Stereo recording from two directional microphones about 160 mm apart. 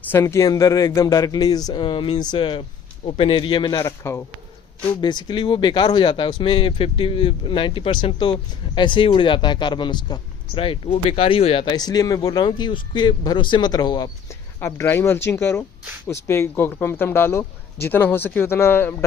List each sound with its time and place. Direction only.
0.0 s speech: 15° left (ahead or behind)
4.9 s speech: 25° left (ahead or behind)
11.8 s speech: 25° left (ahead or behind)